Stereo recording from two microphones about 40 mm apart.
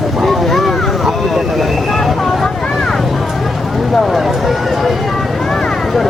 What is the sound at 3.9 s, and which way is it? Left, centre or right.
Speech, centre.